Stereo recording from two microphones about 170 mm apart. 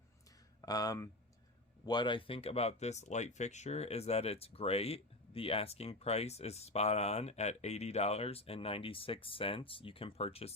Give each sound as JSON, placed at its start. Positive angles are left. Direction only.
{"t": 0.6, "sound": "speech", "side_deg": 20}